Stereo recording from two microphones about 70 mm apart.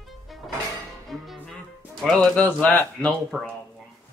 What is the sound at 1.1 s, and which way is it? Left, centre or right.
Music, centre.